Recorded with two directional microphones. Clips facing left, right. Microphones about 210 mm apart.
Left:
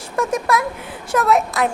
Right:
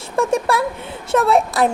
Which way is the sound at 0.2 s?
30° right (ahead or behind).